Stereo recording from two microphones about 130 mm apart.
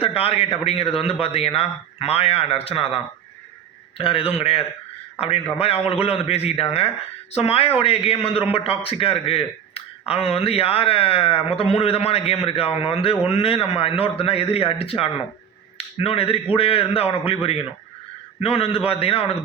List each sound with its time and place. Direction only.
0.0 s a man's voice: 50° left (ahead or behind)